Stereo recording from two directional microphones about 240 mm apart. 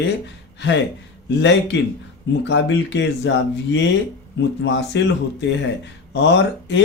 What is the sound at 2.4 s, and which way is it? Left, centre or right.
Speech, left.